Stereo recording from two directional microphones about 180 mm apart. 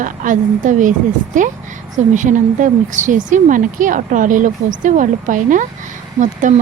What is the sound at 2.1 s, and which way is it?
Speech, 45° right (ahead or behind).